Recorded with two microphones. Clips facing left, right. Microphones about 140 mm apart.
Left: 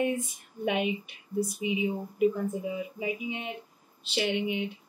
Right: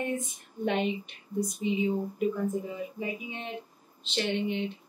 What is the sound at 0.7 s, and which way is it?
Speech, 10° left (ahead or behind).